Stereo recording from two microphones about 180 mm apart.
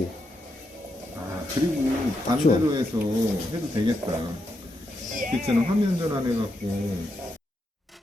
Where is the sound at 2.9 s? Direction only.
20° right (ahead or behind).